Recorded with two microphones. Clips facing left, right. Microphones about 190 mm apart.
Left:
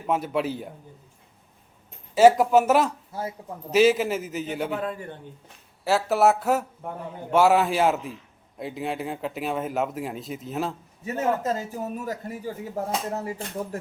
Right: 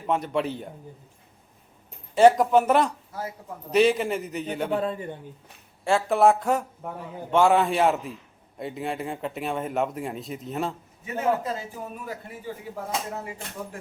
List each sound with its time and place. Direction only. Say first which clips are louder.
0.0 s a man's voice: even; 5° left (ahead or behind)
2.1 s a man's voice: left 1 dB; 5° left (ahead or behind)
3.1 s a man's voice: left 2 dB; 25° left (ahead or behind)
3.7 s a man's voice: left 1 dB; 5° left (ahead or behind)
4.7 s a man's voice: right 3 dB; 25° right (ahead or behind)
5.8 s a man's voice: right 1 dB; 5° left (ahead or behind)
11.0 s speech: left 1 dB; 45° left (ahead or behind)